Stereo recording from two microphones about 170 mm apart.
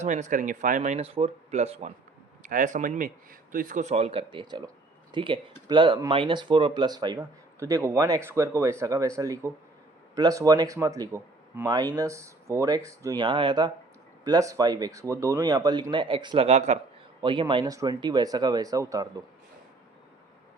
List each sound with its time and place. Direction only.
0.0 s speech: 45° right (ahead or behind)
2.4 s speech: 50° right (ahead or behind); by 16.5 s 30° right (ahead or behind)
16.5 s speech: 40° right (ahead or behind)
17.2 s speech: 30° right (ahead or behind)